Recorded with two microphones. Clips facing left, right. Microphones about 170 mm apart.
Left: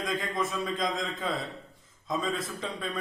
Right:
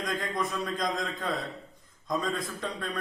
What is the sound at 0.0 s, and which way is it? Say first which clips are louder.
A man's voice: left 1 dB; centre (ahead or behind).